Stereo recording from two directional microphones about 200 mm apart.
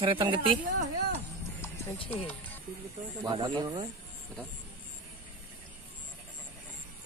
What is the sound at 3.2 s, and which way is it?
Speech, 25° right (ahead or behind).